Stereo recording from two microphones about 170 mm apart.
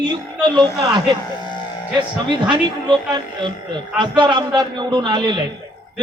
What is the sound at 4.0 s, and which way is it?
A man's voice, 25° right (ahead or behind).